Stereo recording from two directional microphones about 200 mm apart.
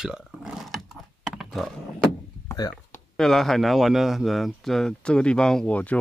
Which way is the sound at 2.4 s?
20° left (ahead or behind).